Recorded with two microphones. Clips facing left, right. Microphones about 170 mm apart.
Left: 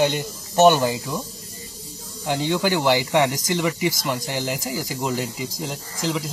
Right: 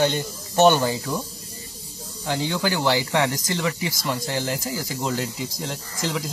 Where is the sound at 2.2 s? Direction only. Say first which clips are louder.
Left 3 dB; 15° left (ahead or behind).